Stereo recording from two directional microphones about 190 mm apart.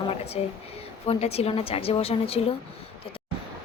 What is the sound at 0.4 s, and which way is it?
Speech, 30° left (ahead or behind).